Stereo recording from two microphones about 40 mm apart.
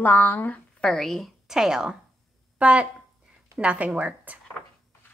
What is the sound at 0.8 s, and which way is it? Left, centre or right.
Speech, centre.